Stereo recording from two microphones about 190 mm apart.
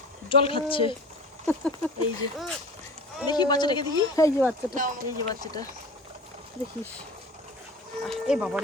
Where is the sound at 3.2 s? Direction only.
20° left (ahead or behind).